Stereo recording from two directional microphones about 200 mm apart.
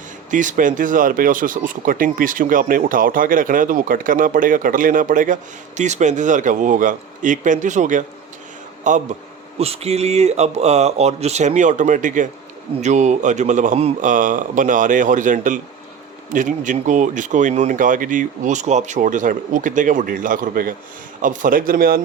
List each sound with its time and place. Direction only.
0.3 s speech: 40° right (ahead or behind)